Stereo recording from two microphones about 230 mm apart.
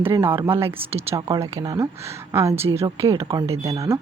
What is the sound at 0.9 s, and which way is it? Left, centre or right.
Speech, right.